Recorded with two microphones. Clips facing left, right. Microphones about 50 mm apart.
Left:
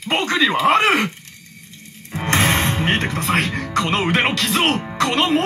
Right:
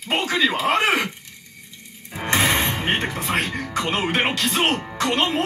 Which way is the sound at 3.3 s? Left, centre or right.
Centre.